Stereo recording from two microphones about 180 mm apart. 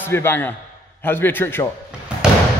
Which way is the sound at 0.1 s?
10° left (ahead or behind).